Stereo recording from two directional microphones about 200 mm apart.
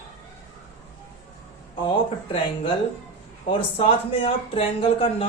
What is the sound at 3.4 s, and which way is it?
Speech, 30° left (ahead or behind).